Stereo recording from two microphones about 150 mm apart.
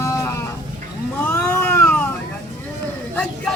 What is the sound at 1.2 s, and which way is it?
Cat, 10° left (ahead or behind).